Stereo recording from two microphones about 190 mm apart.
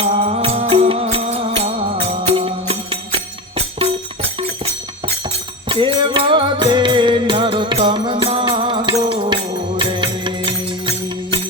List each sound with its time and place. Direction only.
0.0 s music: 35° right (ahead or behind)